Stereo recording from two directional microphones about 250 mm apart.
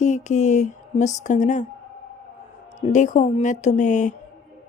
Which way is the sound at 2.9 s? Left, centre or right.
Left.